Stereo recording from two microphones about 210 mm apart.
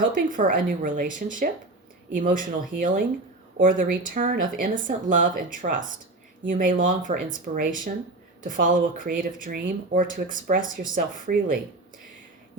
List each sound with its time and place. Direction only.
0.1 s speech: 40° right (ahead or behind)